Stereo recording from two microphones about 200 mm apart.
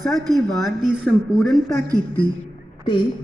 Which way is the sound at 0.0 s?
Centre (ahead or behind).